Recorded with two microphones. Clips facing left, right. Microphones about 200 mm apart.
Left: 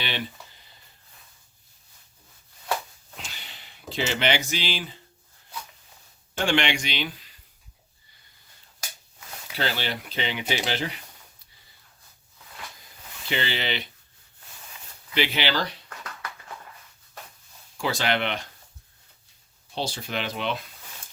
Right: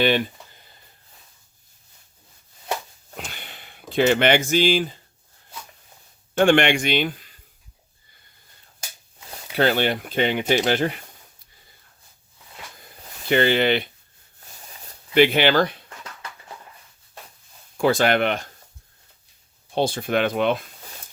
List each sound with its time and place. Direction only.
3.2 s a sound: 55° right (ahead or behind)
6.4 s speech: 55° right (ahead or behind)
9.6 s speech: 55° right (ahead or behind)
13.2 s speech: 50° right (ahead or behind)
15.1 s speech: 55° right (ahead or behind)
17.7 s speech: 50° right (ahead or behind)
19.7 s speech: 55° right (ahead or behind)